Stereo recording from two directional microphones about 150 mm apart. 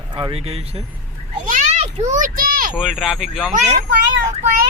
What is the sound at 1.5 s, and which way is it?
Children playing, 55° right (ahead or behind).